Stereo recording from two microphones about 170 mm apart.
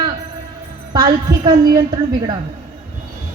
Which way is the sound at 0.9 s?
20° right (ahead or behind).